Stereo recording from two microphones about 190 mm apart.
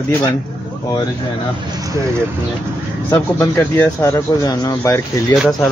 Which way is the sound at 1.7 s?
20° right (ahead or behind).